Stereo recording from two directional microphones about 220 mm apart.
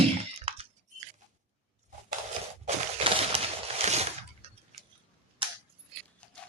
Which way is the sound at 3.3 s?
25° right (ahead or behind).